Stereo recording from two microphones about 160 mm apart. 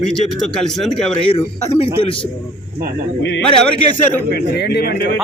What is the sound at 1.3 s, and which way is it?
Speech, 35° left (ahead or behind).